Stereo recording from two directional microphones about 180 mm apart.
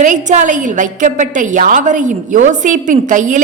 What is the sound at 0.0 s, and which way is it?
A woman's voice, 45° right (ahead or behind).